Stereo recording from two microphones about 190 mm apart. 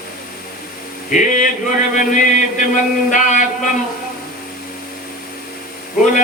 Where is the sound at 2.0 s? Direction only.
40° left (ahead or behind).